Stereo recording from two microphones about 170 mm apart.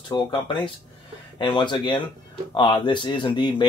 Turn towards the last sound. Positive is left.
turn(degrees=25)  # may be behind; listen again after turning